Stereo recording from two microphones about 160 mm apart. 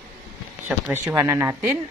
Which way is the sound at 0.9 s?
15° right (ahead or behind).